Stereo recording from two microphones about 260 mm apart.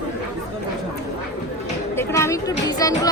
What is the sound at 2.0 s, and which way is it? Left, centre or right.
Speech, centre.